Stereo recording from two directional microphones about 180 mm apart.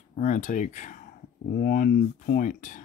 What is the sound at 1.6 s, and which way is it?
Speech, 55° left (ahead or behind).